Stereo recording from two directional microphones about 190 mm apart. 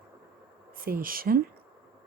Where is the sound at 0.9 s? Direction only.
50° right (ahead or behind).